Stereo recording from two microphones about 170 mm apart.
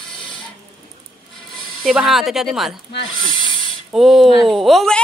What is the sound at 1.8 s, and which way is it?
Speech, centre (ahead or behind).